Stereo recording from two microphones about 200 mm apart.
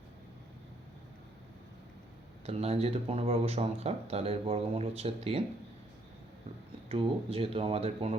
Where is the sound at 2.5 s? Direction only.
30° right (ahead or behind).